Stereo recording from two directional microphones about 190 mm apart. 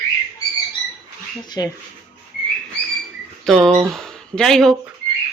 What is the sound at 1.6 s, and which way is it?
Speech, 20° left (ahead or behind).